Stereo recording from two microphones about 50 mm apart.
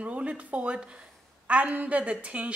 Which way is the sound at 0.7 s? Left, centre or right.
Right.